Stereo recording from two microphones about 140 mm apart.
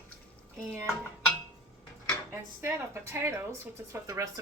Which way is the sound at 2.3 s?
20° right (ahead or behind).